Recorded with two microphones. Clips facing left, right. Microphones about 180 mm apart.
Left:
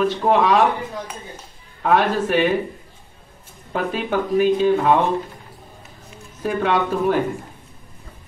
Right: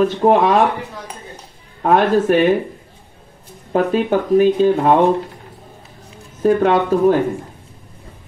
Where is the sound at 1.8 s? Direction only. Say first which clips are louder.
Right 5 dB; 45° right (ahead or behind).